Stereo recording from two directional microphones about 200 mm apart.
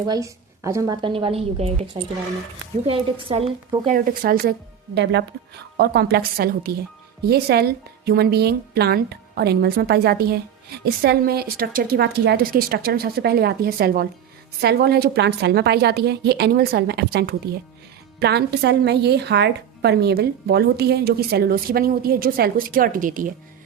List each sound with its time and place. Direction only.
0.0 s a woman's voice: 20° right (ahead or behind)
2.9 s a woman's voice: 25° right (ahead or behind)
3.9 s a woman's voice: 45° right (ahead or behind)
4.9 s a woman's voice: 60° right (ahead or behind); by 23.3 s 40° right (ahead or behind)